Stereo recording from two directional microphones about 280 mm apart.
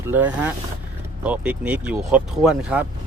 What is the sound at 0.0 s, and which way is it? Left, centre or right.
Speech, centre.